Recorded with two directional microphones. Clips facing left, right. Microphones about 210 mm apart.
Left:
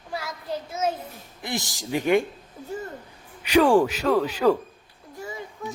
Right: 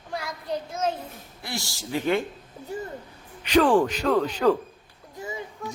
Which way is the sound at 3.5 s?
10° left (ahead or behind).